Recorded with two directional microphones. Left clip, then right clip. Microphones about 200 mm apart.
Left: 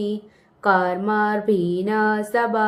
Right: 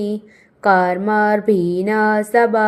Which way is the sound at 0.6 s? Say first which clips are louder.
Right 4 dB; 20° right (ahead or behind).